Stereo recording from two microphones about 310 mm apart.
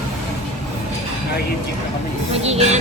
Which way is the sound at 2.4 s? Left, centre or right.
Right.